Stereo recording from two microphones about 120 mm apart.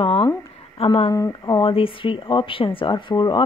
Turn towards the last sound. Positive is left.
turn(degrees=40)  # may be behind; listen again after turning